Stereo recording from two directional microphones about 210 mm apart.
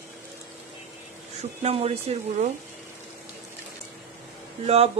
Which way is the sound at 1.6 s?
30° right (ahead or behind).